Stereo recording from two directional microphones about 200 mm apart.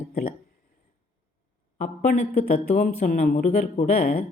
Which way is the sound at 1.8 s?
35° left (ahead or behind).